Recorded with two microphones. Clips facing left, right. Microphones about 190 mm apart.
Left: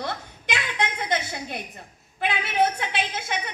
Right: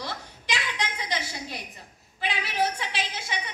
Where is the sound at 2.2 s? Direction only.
55° left (ahead or behind).